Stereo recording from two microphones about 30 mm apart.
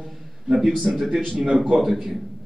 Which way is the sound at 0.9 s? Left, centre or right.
Right.